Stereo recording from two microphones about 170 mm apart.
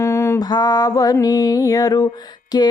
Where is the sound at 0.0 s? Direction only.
15° left (ahead or behind).